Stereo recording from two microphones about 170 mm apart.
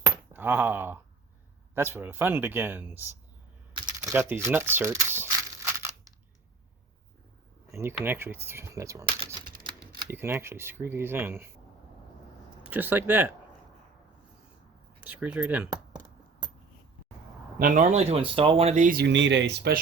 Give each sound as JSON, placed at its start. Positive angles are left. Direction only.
{"t": 0.0, "sound": "a sound", "side_deg": -10}
{"t": 1.7, "sound": "speech", "side_deg": -15}
{"t": 3.8, "sound": "crumpling", "side_deg": -15}
{"t": 7.7, "sound": "speech", "side_deg": -15}
{"t": 10.1, "sound": "speech", "side_deg": -15}
{"t": 12.6, "sound": "speech", "side_deg": -10}
{"t": 15.0, "sound": "speech", "side_deg": -10}
{"t": 17.6, "sound": "speech", "side_deg": -50}
{"t": 18.9, "sound": "speech", "side_deg": -90}